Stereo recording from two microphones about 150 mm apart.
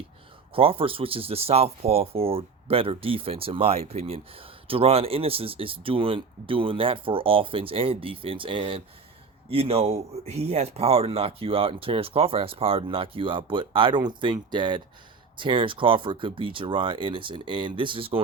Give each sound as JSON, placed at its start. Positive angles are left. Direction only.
{"t": 0.5, "sound": "speech", "side_deg": -40}